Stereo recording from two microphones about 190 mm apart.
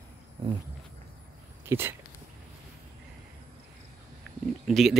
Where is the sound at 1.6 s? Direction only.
10° right (ahead or behind).